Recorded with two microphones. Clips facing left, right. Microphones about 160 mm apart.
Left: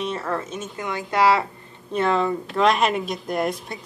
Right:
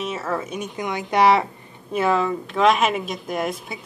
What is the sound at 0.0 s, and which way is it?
Speech, 5° right (ahead or behind).